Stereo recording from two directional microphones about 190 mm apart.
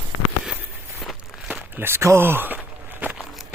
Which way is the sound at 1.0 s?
10° right (ahead or behind).